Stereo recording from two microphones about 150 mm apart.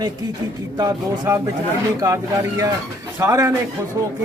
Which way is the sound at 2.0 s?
20° right (ahead or behind).